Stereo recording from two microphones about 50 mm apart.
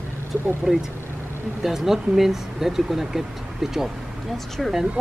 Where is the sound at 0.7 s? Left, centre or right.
Centre.